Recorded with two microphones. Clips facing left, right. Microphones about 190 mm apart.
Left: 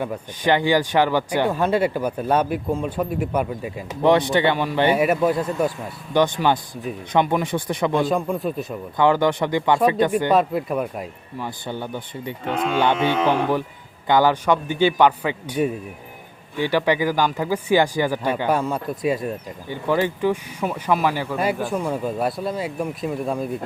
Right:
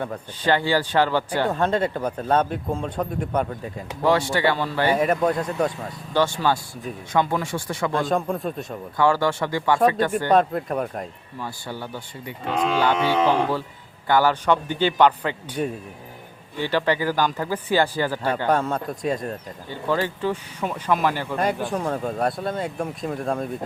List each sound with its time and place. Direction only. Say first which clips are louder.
0.0 s speech: left 2 dB; 15° left (ahead or behind)
5.0 s a man's voice: left 2 dB; 5° left (ahead or behind)
6.1 s speech: left 3 dB; 20° left (ahead or behind)
8.0 s a man's voice: left 2 dB; centre (ahead or behind)
9.0 s speech: left 2 dB; 20° left (ahead or behind)
10.3 s a man's voice: even; 5° left (ahead or behind)
11.4 s speech: left 3 dB; 20° left (ahead or behind); by 23.5 s 5° left (ahead or behind)